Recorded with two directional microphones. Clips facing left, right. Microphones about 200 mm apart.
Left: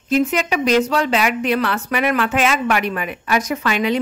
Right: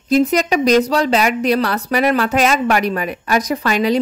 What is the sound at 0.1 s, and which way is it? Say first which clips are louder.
A woman's voice: right 4 dB; 40° right (ahead or behind).